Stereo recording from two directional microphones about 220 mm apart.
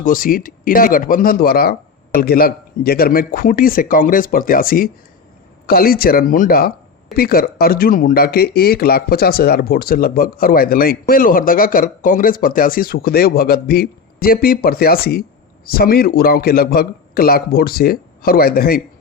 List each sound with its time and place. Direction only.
0.0 s speech: 40° left (ahead or behind)